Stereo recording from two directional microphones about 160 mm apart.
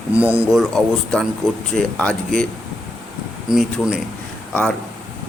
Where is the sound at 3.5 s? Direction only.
Centre (ahead or behind).